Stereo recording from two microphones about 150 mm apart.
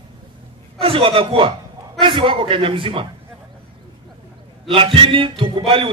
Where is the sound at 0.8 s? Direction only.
40° right (ahead or behind).